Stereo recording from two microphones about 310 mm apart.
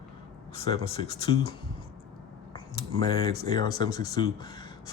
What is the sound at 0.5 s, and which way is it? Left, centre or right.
Speech, centre.